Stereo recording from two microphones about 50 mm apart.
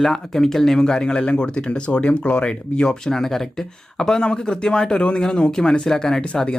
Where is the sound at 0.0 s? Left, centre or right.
Centre.